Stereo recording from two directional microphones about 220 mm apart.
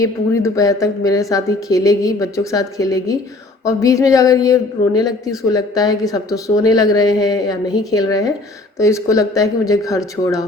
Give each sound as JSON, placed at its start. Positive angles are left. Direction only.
{"t": 0.0, "sound": "speech", "side_deg": 15}